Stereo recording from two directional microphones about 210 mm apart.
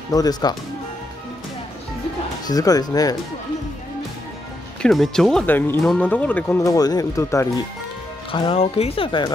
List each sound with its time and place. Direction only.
0.1 s speech: 20° left (ahead or behind)
2.4 s speech: 15° left (ahead or behind)
4.8 s speech: centre (ahead or behind)
8.3 s speech: 25° left (ahead or behind)